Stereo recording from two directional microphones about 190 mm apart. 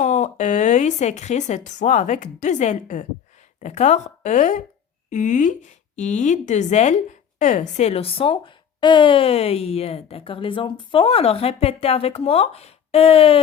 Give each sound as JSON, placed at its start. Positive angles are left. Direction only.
{"t": 0.0, "sound": "speech", "side_deg": 40}